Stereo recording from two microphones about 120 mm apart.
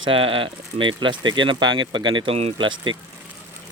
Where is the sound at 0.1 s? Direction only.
45° right (ahead or behind).